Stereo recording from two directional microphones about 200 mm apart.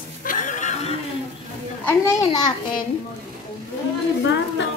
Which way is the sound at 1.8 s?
15° left (ahead or behind).